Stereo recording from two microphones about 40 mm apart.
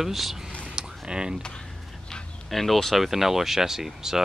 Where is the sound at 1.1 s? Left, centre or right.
Right.